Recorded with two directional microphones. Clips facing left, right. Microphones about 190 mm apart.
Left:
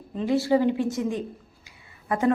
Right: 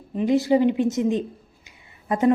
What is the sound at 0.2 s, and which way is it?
A woman's voice, 20° right (ahead or behind).